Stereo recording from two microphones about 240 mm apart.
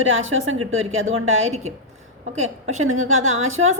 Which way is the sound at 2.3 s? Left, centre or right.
Right.